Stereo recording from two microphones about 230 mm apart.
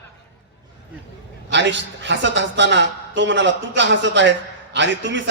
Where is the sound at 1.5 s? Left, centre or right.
Right.